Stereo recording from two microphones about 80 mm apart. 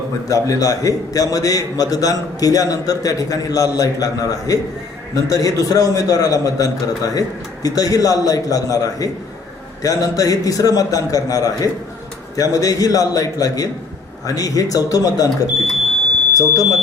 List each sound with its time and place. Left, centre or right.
0.3 s a man's voice: left
16.3 s speech: left